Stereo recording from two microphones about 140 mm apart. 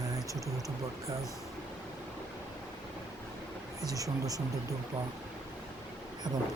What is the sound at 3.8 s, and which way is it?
Speech, 25° right (ahead or behind).